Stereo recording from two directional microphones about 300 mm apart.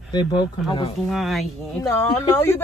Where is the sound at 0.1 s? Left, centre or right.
Centre.